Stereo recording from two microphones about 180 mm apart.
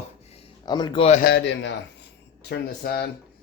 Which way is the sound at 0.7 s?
25° left (ahead or behind).